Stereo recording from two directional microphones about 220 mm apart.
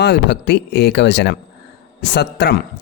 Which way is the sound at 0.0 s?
50° left (ahead or behind).